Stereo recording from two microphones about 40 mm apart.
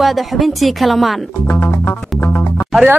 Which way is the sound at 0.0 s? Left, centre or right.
Centre.